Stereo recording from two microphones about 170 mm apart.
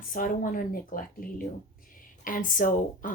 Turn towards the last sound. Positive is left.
turn(degrees=50)  # may be behind; listen again after turning